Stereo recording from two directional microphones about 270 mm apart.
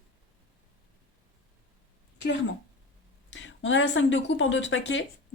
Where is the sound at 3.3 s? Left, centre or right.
Left.